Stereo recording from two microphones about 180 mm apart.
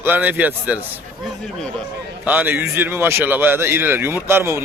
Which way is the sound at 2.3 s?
10° right (ahead or behind).